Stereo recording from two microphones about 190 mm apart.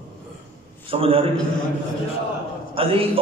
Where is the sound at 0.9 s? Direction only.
30° right (ahead or behind).